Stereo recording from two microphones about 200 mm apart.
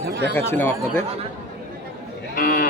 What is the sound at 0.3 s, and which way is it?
Speech, 10° left (ahead or behind).